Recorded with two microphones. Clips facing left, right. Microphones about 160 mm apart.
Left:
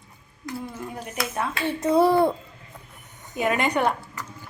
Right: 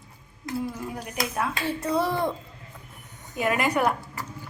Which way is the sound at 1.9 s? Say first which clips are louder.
Left 8 dB; 30° left (ahead or behind).